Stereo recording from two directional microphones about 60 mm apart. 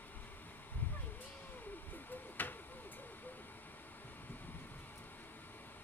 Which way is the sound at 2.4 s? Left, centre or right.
Left.